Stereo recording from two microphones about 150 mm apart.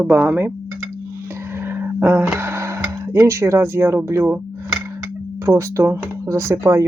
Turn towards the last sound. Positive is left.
turn(degrees=-20)  # may be behind; listen again after turning